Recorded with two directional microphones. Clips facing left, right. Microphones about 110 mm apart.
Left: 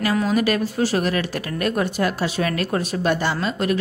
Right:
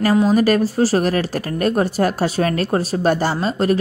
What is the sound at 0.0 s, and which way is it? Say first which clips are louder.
Speech: right 5 dB; 35° right (ahead or behind).